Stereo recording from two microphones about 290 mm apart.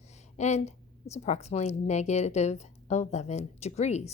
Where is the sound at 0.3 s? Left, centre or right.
Left.